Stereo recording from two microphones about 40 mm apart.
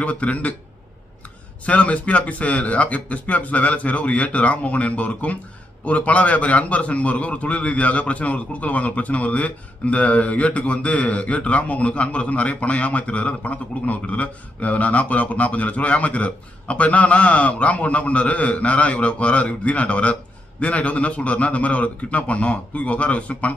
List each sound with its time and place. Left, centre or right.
0.0 s a man's voice: left
1.7 s a man's voice: left